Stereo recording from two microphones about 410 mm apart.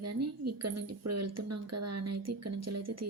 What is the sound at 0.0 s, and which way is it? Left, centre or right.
Speech, right.